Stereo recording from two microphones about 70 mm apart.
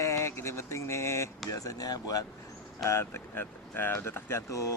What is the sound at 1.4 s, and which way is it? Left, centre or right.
Speech, left.